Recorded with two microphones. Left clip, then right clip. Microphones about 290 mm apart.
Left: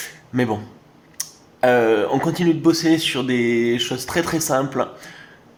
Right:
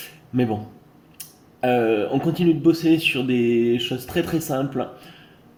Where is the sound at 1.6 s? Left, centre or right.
Left.